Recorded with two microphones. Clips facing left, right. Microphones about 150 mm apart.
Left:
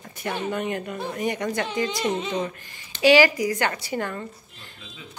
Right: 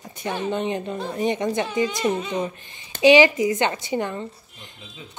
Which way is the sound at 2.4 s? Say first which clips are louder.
Right 2 dB; 20° right (ahead or behind).